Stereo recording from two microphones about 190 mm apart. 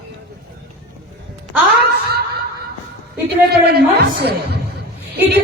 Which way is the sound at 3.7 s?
60° right (ahead or behind).